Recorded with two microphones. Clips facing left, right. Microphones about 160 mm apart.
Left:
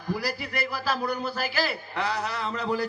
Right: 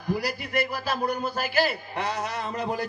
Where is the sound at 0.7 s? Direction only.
50° right (ahead or behind).